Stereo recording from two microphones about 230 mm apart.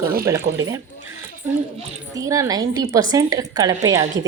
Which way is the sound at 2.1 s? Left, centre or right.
Centre.